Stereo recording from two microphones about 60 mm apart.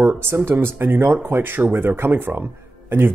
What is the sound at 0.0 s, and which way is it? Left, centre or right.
Speech, right.